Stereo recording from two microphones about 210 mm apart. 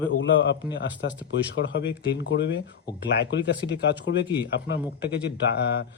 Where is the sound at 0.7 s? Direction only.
55° left (ahead or behind).